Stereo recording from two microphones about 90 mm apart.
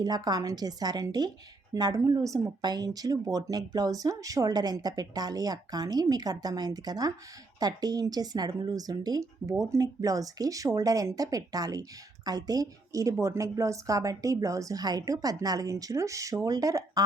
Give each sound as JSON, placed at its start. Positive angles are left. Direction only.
{"t": 0.0, "sound": "speech", "side_deg": -45}